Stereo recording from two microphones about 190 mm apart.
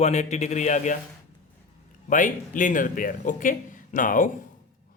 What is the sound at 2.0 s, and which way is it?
Speech, 45° left (ahead or behind).